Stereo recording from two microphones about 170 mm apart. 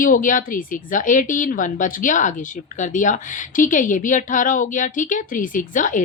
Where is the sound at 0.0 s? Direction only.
50° left (ahead or behind).